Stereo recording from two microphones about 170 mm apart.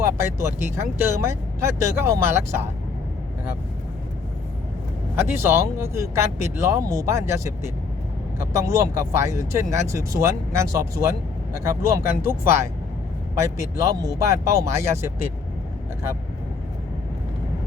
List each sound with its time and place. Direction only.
0.0 s speech: 15° right (ahead or behind)
5.3 s speech: 15° right (ahead or behind)